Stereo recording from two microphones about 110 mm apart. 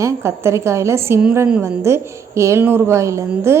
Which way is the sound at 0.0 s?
25° right (ahead or behind).